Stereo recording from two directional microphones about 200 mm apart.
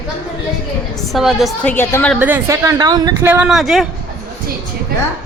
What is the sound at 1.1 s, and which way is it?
A woman's voice, centre (ahead or behind).